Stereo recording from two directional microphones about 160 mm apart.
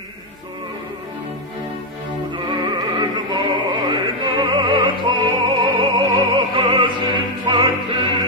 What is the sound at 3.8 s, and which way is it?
Opera, 30° right (ahead or behind).